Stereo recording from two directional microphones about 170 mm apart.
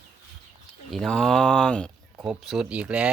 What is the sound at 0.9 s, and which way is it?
Speech, centre (ahead or behind).